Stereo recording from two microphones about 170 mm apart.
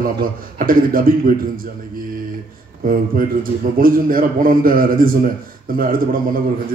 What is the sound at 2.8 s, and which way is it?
A man's voice, 55° right (ahead or behind).